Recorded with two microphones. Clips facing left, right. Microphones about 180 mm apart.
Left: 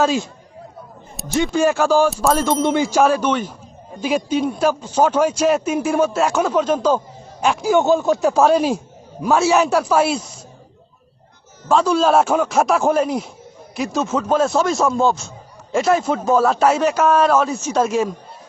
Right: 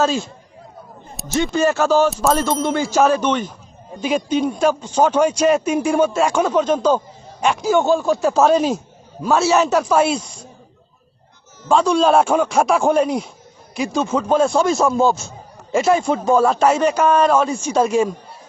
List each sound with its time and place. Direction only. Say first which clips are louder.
0.0 s a man's voice: left 1 dB; 15° left (ahead or behind)
1.2 s a sound: left 2 dB; centre (ahead or behind)
1.5 s a man's voice: even; 10° left (ahead or behind)
2.6 s a man's voice: even; 20° left (ahead or behind)
8.4 s a man's voice: even; 5° left (ahead or behind)
11.7 s speech: right 1 dB; 5° left (ahead or behind)